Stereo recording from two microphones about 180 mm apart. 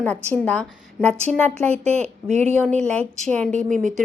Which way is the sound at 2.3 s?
35° right (ahead or behind).